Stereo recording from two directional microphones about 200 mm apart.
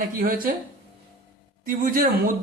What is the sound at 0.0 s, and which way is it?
Speech, 45° right (ahead or behind).